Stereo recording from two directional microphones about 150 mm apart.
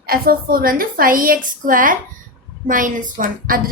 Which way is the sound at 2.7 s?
65° right (ahead or behind).